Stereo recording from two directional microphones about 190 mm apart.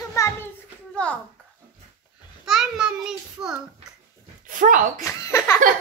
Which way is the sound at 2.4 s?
Centre (ahead or behind).